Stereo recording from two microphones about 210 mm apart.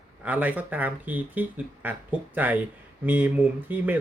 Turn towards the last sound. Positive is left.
turn(degrees=-10)  # may be behind; listen again after turning